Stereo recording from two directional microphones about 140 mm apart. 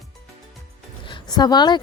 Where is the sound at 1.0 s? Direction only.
35° left (ahead or behind).